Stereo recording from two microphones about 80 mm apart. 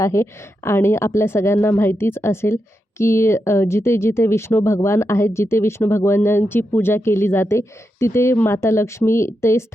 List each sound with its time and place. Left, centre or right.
0.0 s speech: left